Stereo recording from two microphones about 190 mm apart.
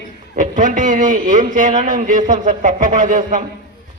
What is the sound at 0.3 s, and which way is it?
A man's voice, 45° right (ahead or behind).